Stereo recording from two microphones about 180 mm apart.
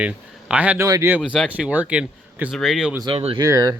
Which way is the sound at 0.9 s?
20° right (ahead or behind).